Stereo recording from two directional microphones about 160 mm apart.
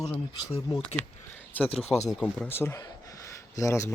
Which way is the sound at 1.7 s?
40° left (ahead or behind).